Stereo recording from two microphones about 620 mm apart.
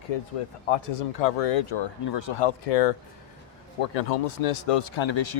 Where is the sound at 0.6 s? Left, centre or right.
Left.